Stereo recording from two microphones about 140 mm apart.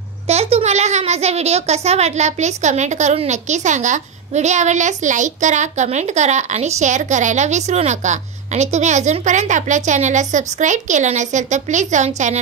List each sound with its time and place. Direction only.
0.3 s a child's voice: 45° right (ahead or behind)